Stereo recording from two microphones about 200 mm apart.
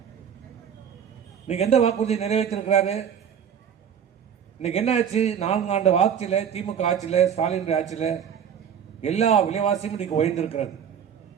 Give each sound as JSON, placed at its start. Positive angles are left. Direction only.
{"t": 1.5, "sound": "a man's voice", "side_deg": 30}
{"t": 4.6, "sound": "a man's voice", "side_deg": 35}